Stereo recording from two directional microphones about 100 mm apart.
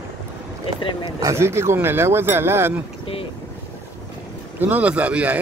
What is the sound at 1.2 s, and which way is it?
Speech, 25° right (ahead or behind).